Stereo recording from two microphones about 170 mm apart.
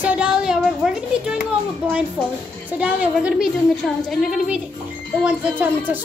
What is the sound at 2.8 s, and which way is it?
A woman's voice, 5° right (ahead or behind).